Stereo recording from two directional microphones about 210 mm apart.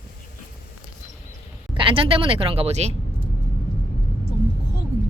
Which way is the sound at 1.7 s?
25° right (ahead or behind).